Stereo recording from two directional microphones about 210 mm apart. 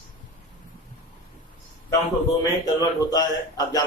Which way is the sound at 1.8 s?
15° left (ahead or behind).